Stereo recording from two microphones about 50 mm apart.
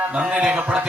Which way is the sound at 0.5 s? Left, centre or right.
Right.